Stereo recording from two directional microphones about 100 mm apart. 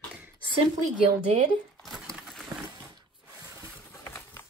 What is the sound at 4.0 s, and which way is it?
Typewriter, 25° left (ahead or behind).